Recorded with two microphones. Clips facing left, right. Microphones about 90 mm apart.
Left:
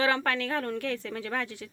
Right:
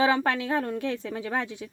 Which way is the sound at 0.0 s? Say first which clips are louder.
Right 3 dB; 15° right (ahead or behind).